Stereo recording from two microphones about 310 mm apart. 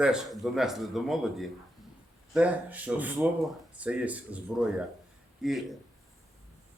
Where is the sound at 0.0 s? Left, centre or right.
Centre.